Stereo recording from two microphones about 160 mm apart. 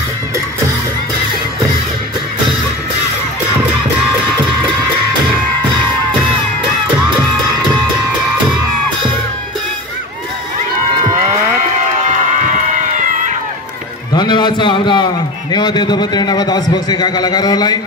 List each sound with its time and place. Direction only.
12.4 s run: 55° right (ahead or behind)
14.1 s a sound: 25° left (ahead or behind)
15.5 s a man's voice: 25° left (ahead or behind)